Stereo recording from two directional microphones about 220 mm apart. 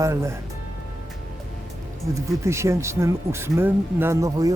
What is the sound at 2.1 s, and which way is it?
Speech, 15° right (ahead or behind).